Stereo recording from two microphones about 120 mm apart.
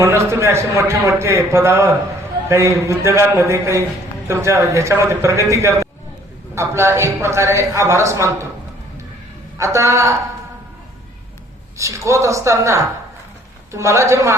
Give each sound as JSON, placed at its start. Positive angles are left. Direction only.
{"t": 0.0, "sound": "a man's voice", "side_deg": -20}
{"t": 9.6, "sound": "a man's voice", "side_deg": -25}
{"t": 11.8, "sound": "a man's voice", "side_deg": -25}